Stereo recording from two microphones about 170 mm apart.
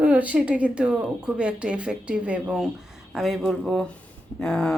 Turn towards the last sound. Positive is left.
turn(degrees=5)  # may be behind; listen again after turning